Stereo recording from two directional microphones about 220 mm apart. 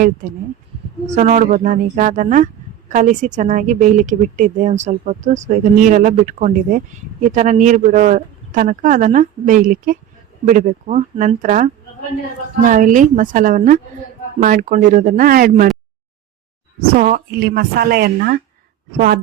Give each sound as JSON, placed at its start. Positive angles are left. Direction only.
{"t": 1.1, "sound": "a woman's voice", "side_deg": -35}
{"t": 16.8, "sound": "speech", "side_deg": -40}